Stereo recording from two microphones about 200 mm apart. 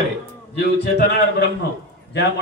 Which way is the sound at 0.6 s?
55° left (ahead or behind).